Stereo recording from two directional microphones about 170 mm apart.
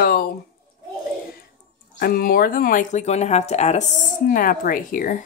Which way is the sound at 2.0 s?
60° left (ahead or behind).